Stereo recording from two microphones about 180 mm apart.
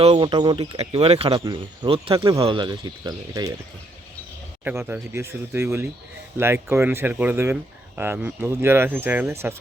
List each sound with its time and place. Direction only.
0.0 s speech: 25° right (ahead or behind)
4.6 s speech: 10° right (ahead or behind)